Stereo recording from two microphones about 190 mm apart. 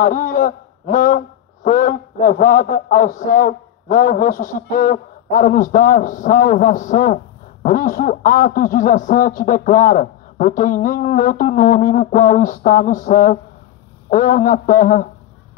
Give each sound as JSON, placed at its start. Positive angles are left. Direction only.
{"t": 0.0, "sound": "a man's voice", "side_deg": 45}